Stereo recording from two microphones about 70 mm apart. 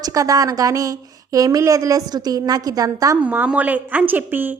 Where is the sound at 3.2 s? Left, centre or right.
Right.